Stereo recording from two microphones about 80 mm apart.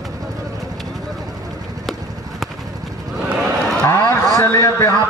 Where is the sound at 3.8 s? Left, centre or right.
Left.